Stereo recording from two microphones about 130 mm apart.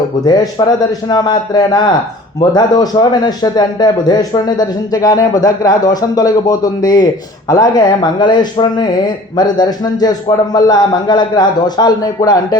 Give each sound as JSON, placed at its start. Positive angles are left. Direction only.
{"t": 1.0, "sound": "a man's voice", "side_deg": 30}